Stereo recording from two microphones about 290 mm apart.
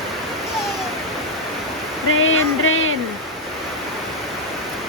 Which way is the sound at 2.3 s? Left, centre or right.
Left.